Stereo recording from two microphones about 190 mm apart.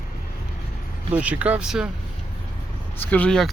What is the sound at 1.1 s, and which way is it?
Speech, 5° right (ahead or behind).